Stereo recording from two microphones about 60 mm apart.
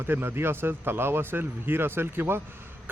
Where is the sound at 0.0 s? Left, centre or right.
Right.